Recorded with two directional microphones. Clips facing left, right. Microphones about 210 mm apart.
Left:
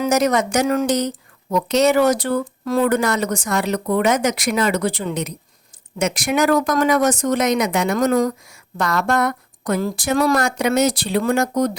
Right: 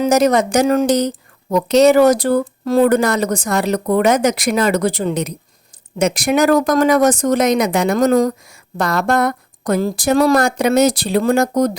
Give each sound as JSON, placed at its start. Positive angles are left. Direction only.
{"t": 0.0, "sound": "a woman's voice", "side_deg": -30}